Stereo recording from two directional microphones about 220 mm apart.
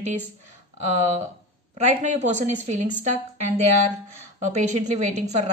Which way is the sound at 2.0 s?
35° right (ahead or behind).